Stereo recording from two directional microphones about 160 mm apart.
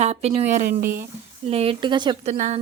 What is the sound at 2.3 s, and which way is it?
Speech, 45° right (ahead or behind).